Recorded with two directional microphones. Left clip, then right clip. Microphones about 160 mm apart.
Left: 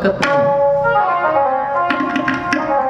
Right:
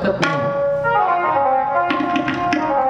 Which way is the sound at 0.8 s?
20° right (ahead or behind).